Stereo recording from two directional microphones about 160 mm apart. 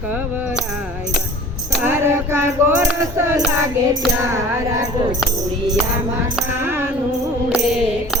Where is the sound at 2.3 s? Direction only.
15° right (ahead or behind).